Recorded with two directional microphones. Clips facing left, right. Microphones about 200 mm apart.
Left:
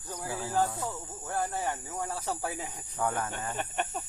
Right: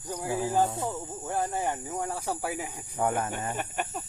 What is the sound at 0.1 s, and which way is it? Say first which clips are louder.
Speech: right 5 dB; 15° right (ahead or behind).